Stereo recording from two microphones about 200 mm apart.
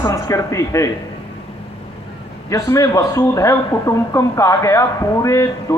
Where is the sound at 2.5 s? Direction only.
15° left (ahead or behind).